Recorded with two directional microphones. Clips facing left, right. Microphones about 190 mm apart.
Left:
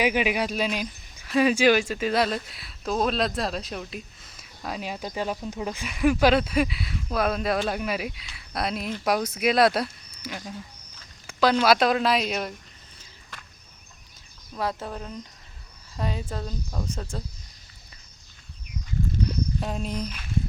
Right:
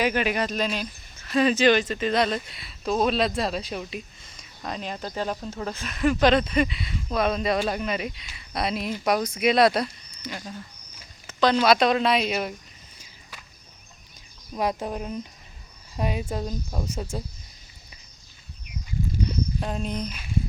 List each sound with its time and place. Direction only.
0.0 s speech: 10° left (ahead or behind)
11.3 s a sound: 5° left (ahead or behind)
11.5 s speech: centre (ahead or behind)
14.5 s speech: 15° right (ahead or behind)
19.3 s speech: centre (ahead or behind)